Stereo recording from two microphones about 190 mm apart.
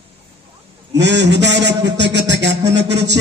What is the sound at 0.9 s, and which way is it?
A man's voice, 65° right (ahead or behind).